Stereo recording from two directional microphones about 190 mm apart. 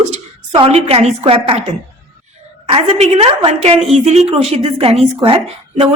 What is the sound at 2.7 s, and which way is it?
A woman's voice, 30° right (ahead or behind).